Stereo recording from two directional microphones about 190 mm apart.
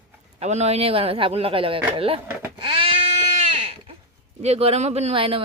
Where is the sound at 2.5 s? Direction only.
25° right (ahead or behind).